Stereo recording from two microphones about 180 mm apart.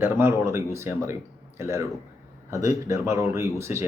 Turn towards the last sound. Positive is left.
turn(degrees=-15)  # may be behind; listen again after turning